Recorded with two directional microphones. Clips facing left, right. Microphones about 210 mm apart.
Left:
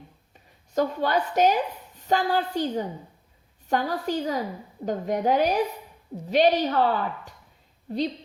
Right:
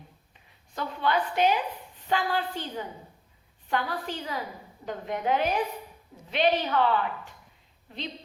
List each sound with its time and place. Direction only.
0.3 s a woman's voice: 45° left (ahead or behind)